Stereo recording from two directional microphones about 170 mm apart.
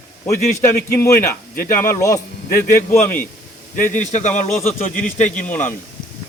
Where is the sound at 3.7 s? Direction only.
50° left (ahead or behind).